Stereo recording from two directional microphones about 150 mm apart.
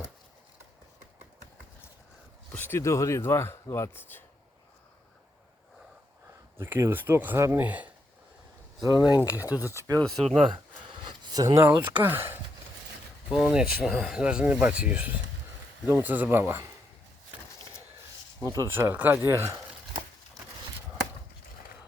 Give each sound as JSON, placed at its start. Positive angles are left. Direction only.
{"t": 2.5, "sound": "speech", "side_deg": 15}
{"t": 6.6, "sound": "speech", "side_deg": -15}
{"t": 9.7, "sound": "speech", "side_deg": -20}
{"t": 11.0, "sound": "speech", "side_deg": -25}
{"t": 18.4, "sound": "speech", "side_deg": -20}